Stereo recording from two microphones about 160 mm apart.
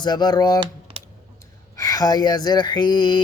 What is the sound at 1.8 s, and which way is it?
Mantra, 20° left (ahead or behind).